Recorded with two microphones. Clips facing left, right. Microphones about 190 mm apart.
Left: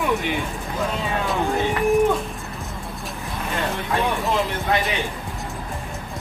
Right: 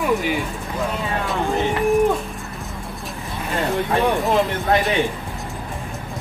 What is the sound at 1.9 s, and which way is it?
Pigeon, centre (ahead or behind).